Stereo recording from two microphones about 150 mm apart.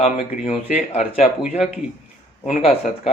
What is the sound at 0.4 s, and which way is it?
Speech, 45° left (ahead or behind).